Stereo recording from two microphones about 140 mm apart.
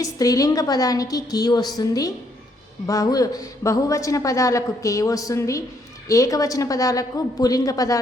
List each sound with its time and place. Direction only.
0.0 s a woman's voice: 25° left (ahead or behind)